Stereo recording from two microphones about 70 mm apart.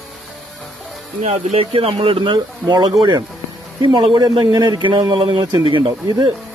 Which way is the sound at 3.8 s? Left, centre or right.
Right.